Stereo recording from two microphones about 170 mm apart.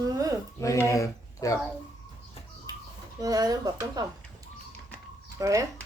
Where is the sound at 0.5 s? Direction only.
20° left (ahead or behind).